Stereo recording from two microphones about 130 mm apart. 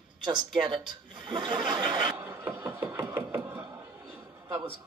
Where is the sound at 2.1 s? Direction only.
15° right (ahead or behind).